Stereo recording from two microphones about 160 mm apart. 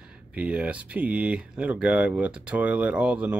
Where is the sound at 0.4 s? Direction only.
10° right (ahead or behind).